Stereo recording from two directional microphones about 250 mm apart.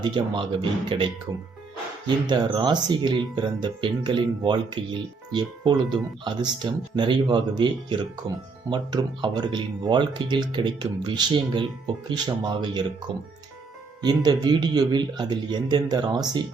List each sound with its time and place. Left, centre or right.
0.0 s speech: centre
14.0 s speech: centre